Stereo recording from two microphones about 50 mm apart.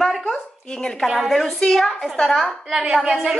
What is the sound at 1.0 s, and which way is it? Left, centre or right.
A woman's voice, centre.